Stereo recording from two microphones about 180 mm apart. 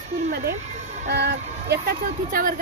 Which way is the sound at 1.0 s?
70° right (ahead or behind).